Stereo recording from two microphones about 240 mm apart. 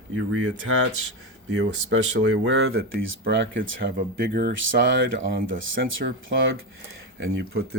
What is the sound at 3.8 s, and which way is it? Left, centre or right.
Speech, right.